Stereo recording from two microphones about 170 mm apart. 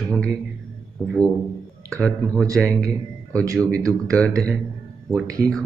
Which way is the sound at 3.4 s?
20° right (ahead or behind).